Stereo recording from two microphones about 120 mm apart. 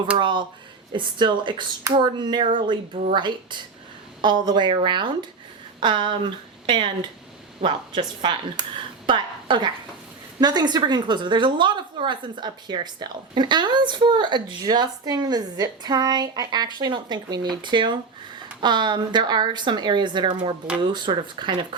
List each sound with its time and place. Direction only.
0.2 s a woman's voice: 40° right (ahead or behind)